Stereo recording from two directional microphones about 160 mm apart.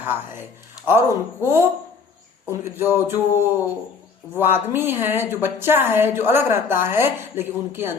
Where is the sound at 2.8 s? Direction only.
15° right (ahead or behind).